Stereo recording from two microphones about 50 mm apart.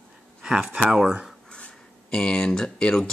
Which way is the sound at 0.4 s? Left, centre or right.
Centre.